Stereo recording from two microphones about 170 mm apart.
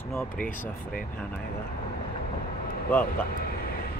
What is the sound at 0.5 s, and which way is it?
Speech, 50° left (ahead or behind).